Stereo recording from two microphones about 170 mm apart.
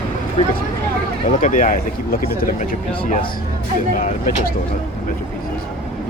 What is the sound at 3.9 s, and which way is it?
Speech, 50° left (ahead or behind).